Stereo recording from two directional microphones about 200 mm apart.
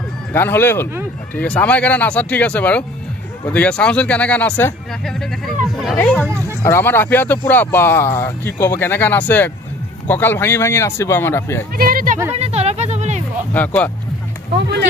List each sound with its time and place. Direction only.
0.3 s speech: 10° left (ahead or behind)
11.7 s a sound: 45° right (ahead or behind)
12.4 s music: 30° right (ahead or behind)